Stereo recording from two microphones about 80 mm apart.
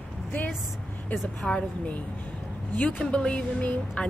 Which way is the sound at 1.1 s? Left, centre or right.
Centre.